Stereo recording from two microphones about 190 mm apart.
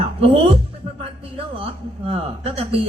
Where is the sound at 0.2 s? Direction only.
30° right (ahead or behind).